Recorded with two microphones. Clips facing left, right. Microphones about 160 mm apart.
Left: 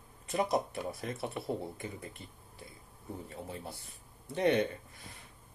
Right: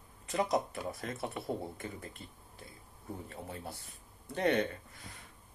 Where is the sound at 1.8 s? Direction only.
20° left (ahead or behind).